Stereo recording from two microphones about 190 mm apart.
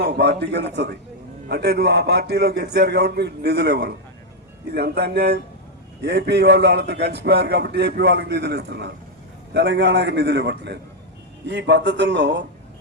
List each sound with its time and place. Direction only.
0.0 s a man's voice: 60° right (ahead or behind)